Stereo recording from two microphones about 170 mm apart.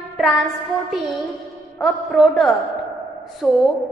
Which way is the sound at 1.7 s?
Centre (ahead or behind).